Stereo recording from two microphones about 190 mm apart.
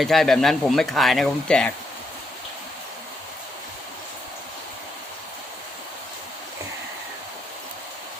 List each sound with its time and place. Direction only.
0.0 s speech: centre (ahead or behind)